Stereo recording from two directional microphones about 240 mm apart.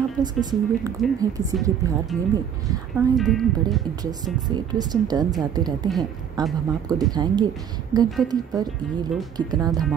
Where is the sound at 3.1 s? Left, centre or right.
Centre.